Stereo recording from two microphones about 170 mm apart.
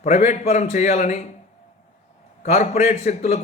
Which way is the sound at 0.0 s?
40° left (ahead or behind).